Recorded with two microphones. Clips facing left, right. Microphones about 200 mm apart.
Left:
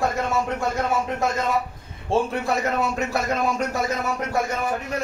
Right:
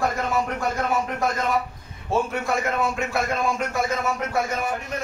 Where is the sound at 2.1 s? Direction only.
30° left (ahead or behind).